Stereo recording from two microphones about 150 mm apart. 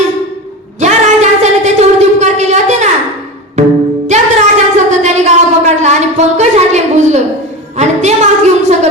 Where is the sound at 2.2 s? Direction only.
50° right (ahead or behind).